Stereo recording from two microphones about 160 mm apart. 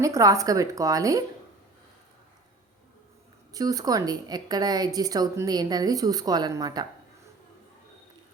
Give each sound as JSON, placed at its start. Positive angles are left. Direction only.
{"t": 0.0, "sound": "a woman's voice", "side_deg": -20}
{"t": 3.5, "sound": "a woman's voice", "side_deg": -20}